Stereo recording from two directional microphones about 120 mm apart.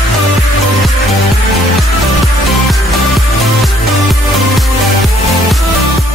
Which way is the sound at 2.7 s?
Centre (ahead or behind).